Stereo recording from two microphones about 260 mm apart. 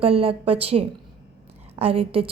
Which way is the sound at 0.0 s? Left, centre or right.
Right.